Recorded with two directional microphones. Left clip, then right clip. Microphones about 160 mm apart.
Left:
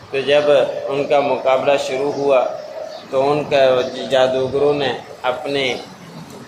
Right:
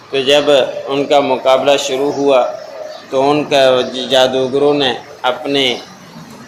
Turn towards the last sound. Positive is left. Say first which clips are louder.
# right 5 dB
turn(degrees=-35)  # may be behind; listen again after turning